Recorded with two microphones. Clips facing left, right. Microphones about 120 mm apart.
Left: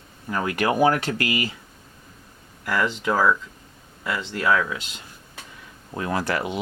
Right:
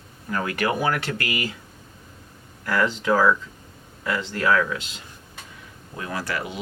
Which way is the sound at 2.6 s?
5° left (ahead or behind).